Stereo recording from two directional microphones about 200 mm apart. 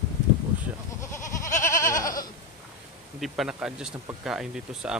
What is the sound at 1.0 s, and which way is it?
Goat, 15° left (ahead or behind).